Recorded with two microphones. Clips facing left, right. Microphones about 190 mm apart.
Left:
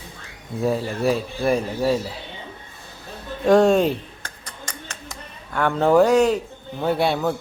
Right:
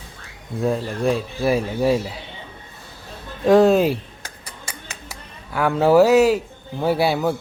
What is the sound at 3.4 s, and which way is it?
Speech, centre (ahead or behind).